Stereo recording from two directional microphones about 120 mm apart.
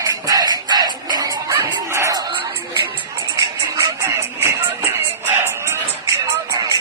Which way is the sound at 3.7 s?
25° right (ahead or behind).